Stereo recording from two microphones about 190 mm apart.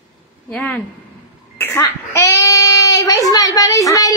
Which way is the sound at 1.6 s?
10° left (ahead or behind).